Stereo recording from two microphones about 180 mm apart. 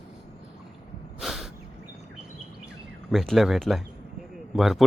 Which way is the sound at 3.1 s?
Centre (ahead or behind).